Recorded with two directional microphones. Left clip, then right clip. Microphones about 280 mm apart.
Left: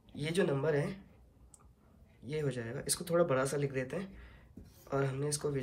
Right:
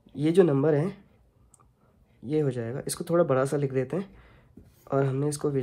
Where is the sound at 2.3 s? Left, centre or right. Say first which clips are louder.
Right 10 dB; centre.